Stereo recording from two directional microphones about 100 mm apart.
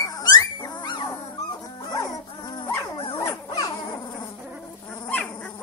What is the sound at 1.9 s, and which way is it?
Dog, 35° left (ahead or behind).